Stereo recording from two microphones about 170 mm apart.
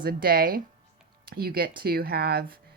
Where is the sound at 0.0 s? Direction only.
60° right (ahead or behind).